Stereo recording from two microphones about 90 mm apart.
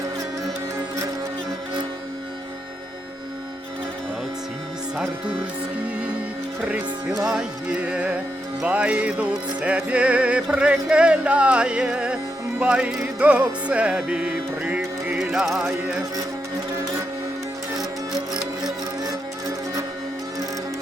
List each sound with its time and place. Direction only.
6.6 s music: 15° right (ahead or behind)
18.1 s music: 5° right (ahead or behind)
19.0 s music: 40° right (ahead or behind)